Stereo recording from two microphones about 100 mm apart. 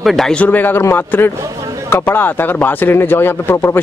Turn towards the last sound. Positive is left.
turn(degrees=25)  # may be behind; listen again after turning